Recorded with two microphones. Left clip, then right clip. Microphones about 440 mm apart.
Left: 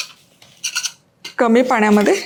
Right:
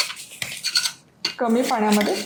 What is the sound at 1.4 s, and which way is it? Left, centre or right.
Speech, left.